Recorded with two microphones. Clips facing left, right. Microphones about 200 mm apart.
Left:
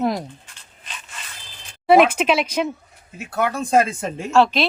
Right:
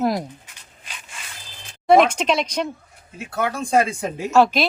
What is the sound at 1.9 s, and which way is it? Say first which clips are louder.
A man's voice: left 1 dB; 5° left (ahead or behind).